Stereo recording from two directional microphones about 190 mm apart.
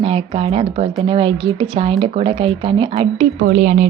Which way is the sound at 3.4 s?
50° right (ahead or behind).